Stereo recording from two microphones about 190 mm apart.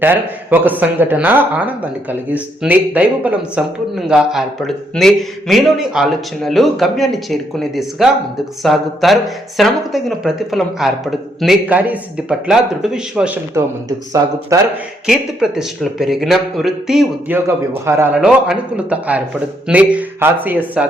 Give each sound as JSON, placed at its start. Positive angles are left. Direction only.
{"t": 0.0, "sound": "a man's voice", "side_deg": -10}
{"t": 15.0, "sound": "a man's voice", "side_deg": -5}